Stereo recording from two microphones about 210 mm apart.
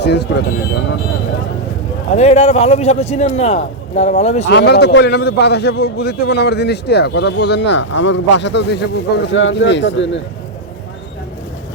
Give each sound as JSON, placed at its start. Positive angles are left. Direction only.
{"t": 0.0, "sound": "a man's voice", "side_deg": 55}
{"t": 2.1, "sound": "a man's voice", "side_deg": 30}
{"t": 4.4, "sound": "a man's voice", "side_deg": 50}